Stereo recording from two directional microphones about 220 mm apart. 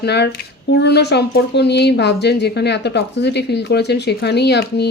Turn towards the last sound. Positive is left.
turn(degrees=50)  # may be behind; listen again after turning